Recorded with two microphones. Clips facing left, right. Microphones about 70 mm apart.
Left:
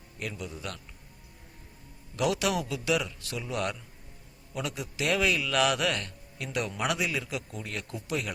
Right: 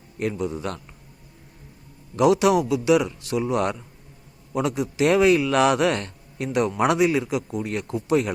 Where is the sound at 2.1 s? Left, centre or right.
Right.